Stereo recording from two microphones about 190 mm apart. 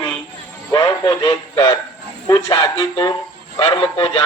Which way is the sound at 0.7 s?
20° left (ahead or behind).